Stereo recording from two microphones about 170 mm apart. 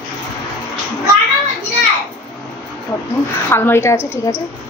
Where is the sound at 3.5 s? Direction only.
15° left (ahead or behind).